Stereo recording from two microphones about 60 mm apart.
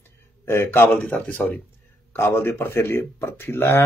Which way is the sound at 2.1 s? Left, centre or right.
Left.